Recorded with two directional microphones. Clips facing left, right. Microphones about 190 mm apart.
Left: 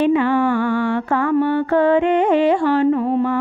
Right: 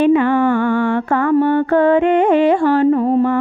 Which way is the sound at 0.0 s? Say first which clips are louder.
Right 3 dB; 55° right (ahead or behind).